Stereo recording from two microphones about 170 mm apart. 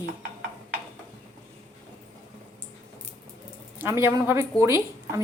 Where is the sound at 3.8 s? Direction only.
15° right (ahead or behind).